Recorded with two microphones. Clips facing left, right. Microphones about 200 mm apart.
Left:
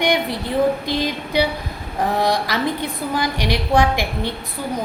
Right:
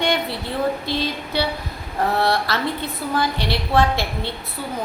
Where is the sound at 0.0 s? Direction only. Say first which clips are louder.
Left 3 dB; 15° left (ahead or behind).